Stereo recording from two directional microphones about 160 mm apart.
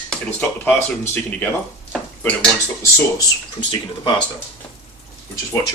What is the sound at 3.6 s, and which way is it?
Speech, 30° left (ahead or behind).